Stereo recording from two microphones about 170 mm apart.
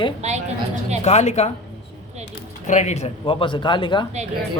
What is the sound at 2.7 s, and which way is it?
Speech, 45° left (ahead or behind).